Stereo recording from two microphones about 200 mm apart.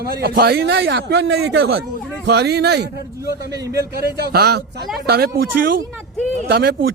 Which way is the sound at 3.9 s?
50° right (ahead or behind).